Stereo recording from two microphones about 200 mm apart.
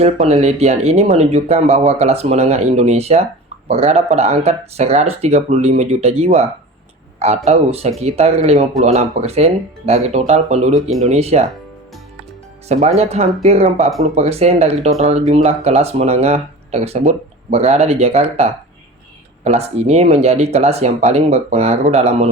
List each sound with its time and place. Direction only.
0.0 s speech: 30° right (ahead or behind)
12.6 s speech: 35° right (ahead or behind)